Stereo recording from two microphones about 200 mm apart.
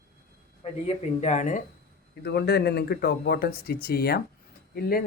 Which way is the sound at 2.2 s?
55° left (ahead or behind).